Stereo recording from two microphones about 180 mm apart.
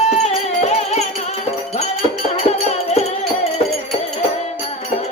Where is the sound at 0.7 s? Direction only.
35° left (ahead or behind).